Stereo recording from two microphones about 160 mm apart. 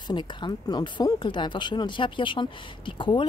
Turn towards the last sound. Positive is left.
turn(degrees=30)  # may be behind; listen again after turning